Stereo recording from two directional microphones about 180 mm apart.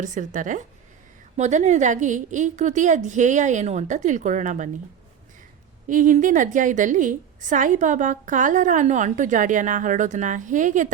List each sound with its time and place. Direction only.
0.0 s a woman's voice: 45° right (ahead or behind)
5.9 s a woman's voice: 45° right (ahead or behind)